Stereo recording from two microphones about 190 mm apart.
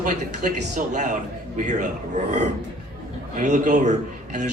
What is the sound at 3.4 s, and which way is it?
A man's voice, 40° right (ahead or behind).